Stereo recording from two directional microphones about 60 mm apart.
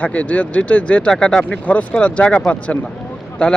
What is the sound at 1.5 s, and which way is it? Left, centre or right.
A man's voice, left.